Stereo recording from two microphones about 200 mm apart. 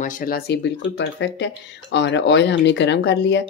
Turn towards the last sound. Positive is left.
turn(degrees=60)  # may be behind; listen again after turning